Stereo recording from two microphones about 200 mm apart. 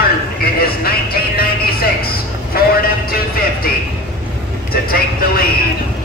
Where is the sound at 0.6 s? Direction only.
50° left (ahead or behind).